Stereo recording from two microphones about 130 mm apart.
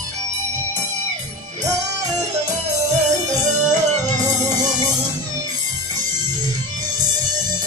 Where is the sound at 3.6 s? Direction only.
70° right (ahead or behind).